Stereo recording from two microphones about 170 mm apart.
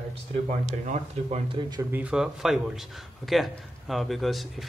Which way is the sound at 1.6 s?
25° right (ahead or behind).